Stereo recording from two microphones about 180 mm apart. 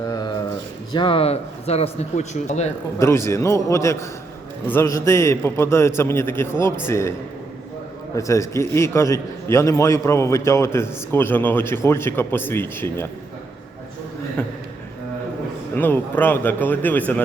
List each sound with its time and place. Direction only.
0.1 s a sound: 20° left (ahead or behind)
0.9 s speech: 30° left (ahead or behind)
3.0 s a man's voice: 15° left (ahead or behind)
8.1 s a man's voice: 15° left (ahead or behind)
14.4 s a sound: 10° left (ahead or behind)
15.7 s a man's voice: 10° left (ahead or behind)